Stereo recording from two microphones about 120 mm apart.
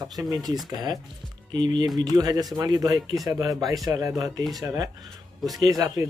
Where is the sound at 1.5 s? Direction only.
35° right (ahead or behind).